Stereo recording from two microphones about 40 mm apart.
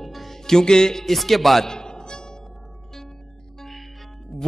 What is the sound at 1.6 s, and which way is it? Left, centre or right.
Music, centre.